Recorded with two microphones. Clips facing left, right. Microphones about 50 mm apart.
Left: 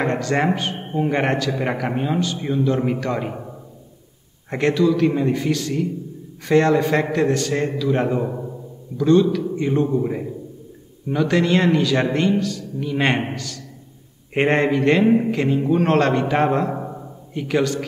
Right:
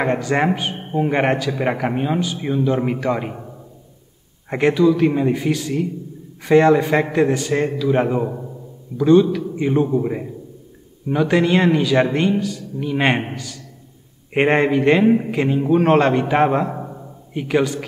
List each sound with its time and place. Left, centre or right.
0.0 s a man's voice: centre
4.5 s a man's voice: centre